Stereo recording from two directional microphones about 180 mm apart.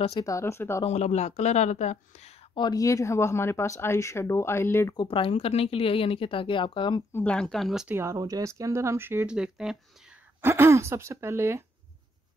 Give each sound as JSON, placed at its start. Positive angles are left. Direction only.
{"t": 0.2, "sound": "speech", "side_deg": 15}
{"t": 0.8, "sound": "speech", "side_deg": 40}
{"t": 5.0, "sound": "speech", "side_deg": 30}
{"t": 7.1, "sound": "speech", "side_deg": 10}
{"t": 7.9, "sound": "speech", "side_deg": -15}
{"t": 10.5, "sound": "speech", "side_deg": -15}